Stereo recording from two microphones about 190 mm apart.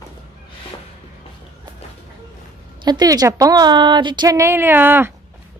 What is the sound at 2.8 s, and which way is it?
A woman's voice, 20° right (ahead or behind).